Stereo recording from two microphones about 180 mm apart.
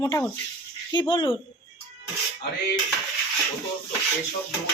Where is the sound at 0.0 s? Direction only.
15° left (ahead or behind).